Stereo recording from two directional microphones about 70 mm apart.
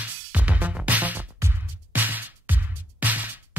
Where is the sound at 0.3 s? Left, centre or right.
Right.